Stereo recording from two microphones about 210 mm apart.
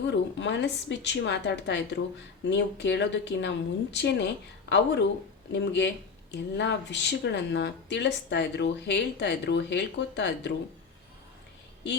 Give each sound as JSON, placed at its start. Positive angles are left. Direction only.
{"t": 0.1, "sound": "a woman's voice", "side_deg": 55}